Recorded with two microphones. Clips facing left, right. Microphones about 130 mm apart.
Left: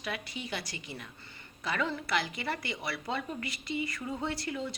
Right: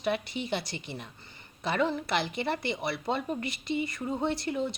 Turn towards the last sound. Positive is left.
turn(degrees=-25)  # may be behind; listen again after turning